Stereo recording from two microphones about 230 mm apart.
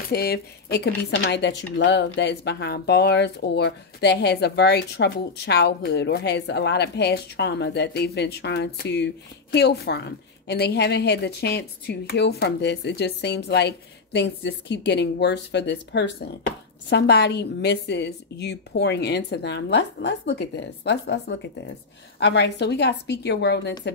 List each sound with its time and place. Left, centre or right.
0.1 s speech: left